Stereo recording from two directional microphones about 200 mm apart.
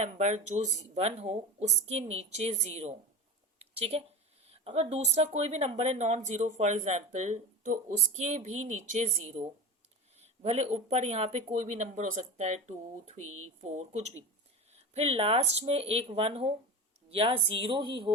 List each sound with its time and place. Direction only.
0.0 s a woman's voice: 35° right (ahead or behind)